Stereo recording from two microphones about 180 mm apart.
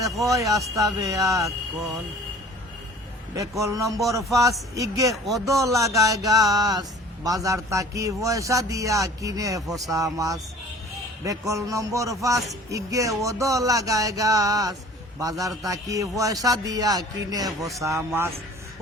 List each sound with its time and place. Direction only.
0.3 s a man's voice: 20° right (ahead or behind)
3.3 s a man's voice: 15° right (ahead or behind)
5.1 s speech: centre (ahead or behind)
5.5 s a man's voice: 15° right (ahead or behind)